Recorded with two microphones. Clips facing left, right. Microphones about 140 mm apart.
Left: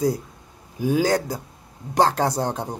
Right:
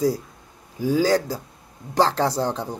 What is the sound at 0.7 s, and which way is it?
Speech, 15° left (ahead or behind).